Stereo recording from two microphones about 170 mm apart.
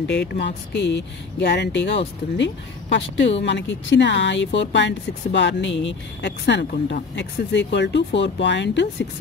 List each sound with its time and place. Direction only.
0.0 s speech: 85° left